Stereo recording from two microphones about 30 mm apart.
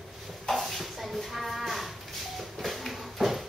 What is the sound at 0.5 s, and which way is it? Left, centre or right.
Livestock, centre.